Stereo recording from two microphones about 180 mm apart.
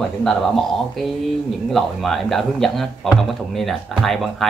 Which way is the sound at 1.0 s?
Centre (ahead or behind).